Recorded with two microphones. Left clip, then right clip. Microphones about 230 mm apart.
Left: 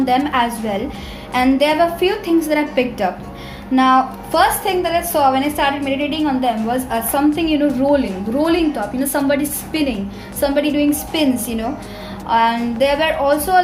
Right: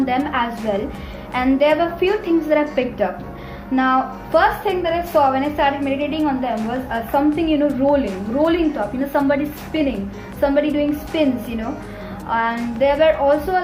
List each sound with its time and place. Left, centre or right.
0.0 s a woman's voice: left